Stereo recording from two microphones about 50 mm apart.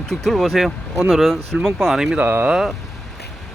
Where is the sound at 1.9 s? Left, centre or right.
Centre.